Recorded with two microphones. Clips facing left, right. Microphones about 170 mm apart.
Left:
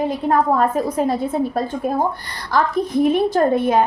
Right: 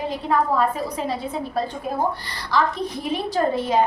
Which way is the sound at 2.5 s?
50° left (ahead or behind).